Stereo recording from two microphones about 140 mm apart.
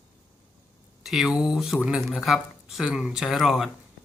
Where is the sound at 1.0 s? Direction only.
Centre (ahead or behind).